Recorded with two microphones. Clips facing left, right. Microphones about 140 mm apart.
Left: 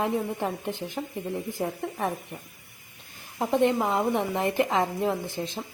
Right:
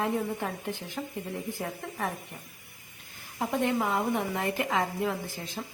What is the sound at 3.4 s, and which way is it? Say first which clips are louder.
A woman's voice: left 5 dB; 20° left (ahead or behind).